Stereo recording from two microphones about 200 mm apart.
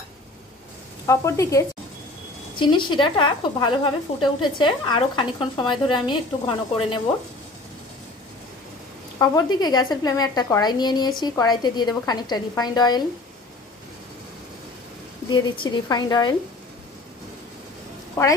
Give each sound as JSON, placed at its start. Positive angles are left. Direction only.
{"t": 1.0, "sound": "a woman's voice", "side_deg": 15}
{"t": 9.2, "sound": "a woman's voice", "side_deg": 20}
{"t": 15.2, "sound": "a woman's voice", "side_deg": 25}
{"t": 18.2, "sound": "speech", "side_deg": 15}